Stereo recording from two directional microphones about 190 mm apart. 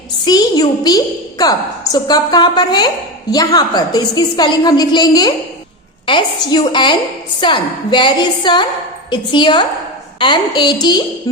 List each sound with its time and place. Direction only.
0.3 s a woman's voice: 20° left (ahead or behind)